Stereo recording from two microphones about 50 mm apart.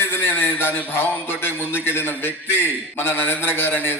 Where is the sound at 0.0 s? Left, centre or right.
Left.